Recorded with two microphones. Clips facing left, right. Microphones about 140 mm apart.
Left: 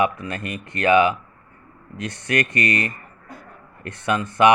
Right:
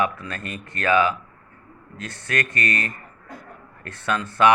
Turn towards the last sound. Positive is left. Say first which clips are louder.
# left 2 dB
turn(degrees=15)  # may be behind; listen again after turning